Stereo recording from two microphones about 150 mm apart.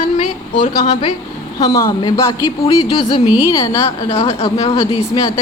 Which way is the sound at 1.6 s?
20° left (ahead or behind).